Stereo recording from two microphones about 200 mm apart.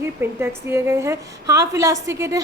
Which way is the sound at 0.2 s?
10° right (ahead or behind).